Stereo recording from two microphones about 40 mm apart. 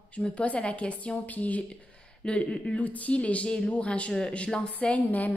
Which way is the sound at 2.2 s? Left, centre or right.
Left.